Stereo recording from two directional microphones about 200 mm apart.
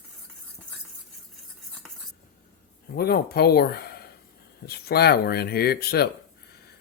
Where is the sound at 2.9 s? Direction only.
50° left (ahead or behind).